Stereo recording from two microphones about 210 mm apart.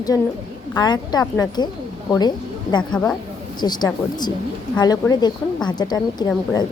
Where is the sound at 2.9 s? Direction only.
10° left (ahead or behind).